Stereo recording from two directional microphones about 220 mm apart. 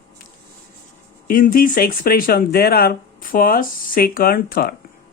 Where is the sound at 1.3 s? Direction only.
40° left (ahead or behind).